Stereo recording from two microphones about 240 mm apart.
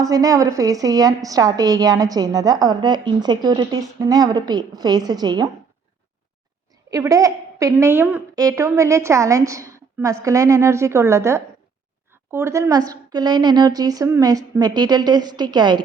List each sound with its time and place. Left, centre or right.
0.0 s a woman's voice: centre
6.9 s a woman's voice: centre